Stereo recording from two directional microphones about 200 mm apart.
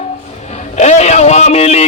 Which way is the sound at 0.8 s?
35° left (ahead or behind).